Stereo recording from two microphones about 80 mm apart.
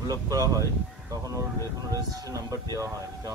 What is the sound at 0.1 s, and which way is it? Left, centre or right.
Speech, right.